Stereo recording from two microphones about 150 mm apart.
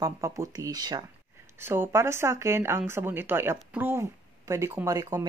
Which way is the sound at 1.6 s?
15° right (ahead or behind).